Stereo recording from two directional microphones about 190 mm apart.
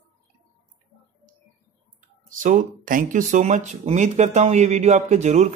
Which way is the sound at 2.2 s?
45° right (ahead or behind).